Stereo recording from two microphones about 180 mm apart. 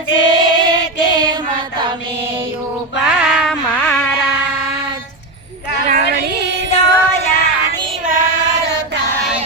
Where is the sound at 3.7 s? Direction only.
5° left (ahead or behind).